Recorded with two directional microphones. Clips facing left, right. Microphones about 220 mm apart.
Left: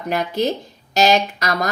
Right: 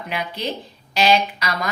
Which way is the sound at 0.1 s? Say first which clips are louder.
Left 7 dB; 45° left (ahead or behind).